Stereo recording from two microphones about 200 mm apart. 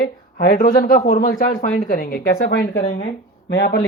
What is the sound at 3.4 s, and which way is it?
Speech, 50° left (ahead or behind).